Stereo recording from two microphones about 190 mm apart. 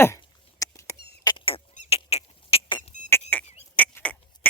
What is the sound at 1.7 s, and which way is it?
Rodents, 35° left (ahead or behind).